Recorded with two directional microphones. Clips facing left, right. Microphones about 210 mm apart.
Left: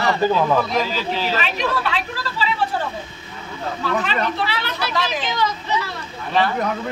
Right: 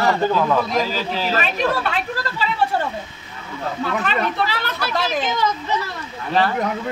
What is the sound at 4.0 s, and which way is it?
Speech, 45° right (ahead or behind).